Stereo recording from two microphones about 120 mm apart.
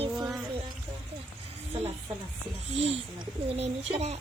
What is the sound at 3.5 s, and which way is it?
Speech, 60° right (ahead or behind).